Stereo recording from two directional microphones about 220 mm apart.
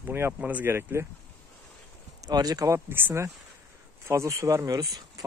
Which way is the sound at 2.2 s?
15° right (ahead or behind).